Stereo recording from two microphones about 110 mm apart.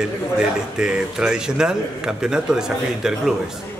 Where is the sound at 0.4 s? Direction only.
5° right (ahead or behind).